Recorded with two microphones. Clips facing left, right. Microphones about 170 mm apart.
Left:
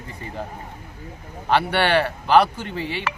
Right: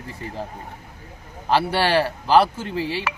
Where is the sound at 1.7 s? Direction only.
30° right (ahead or behind).